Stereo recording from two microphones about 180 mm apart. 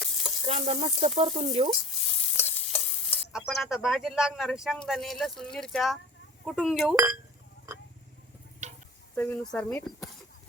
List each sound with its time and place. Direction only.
0.0 s sizzle: centre (ahead or behind)
0.4 s speech: 35° right (ahead or behind)
2.4 s stir: 10° left (ahead or behind)
3.3 s a man's voice: centre (ahead or behind)
6.9 s speech: 15° right (ahead or behind)
8.6 s a sound: 40° right (ahead or behind)
9.1 s speech: 10° left (ahead or behind)